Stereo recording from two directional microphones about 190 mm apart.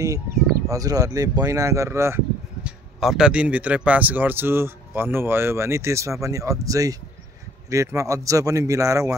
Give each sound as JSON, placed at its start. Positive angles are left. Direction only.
{"t": 0.7, "sound": "speech", "side_deg": -20}
{"t": 3.0, "sound": "speech", "side_deg": 0}